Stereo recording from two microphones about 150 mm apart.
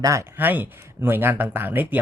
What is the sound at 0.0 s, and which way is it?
Speech, 20° right (ahead or behind).